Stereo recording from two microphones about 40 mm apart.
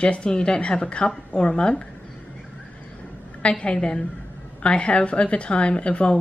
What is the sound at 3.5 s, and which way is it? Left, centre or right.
Speech, left.